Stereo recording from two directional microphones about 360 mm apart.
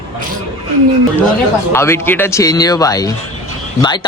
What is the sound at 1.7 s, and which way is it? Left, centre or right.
Speech, centre.